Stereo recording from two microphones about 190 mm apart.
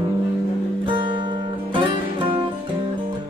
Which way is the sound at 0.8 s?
25° right (ahead or behind).